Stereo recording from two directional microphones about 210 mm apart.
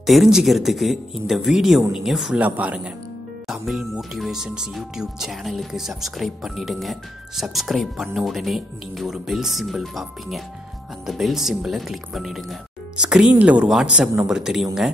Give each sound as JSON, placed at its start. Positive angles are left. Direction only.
{"t": 0.0, "sound": "speech", "side_deg": 0}